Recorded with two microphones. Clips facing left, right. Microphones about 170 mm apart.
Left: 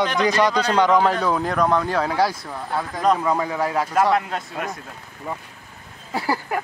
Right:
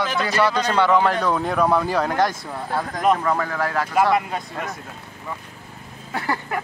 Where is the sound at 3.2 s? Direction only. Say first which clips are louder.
Left 1 dB; 15° left (ahead or behind).